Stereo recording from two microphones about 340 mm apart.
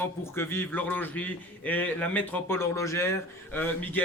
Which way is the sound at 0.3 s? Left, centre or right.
Centre.